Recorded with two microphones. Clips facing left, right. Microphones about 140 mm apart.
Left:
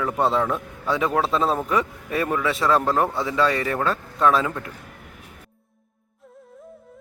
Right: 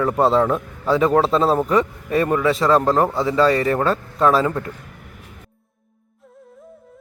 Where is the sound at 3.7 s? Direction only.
30° right (ahead or behind).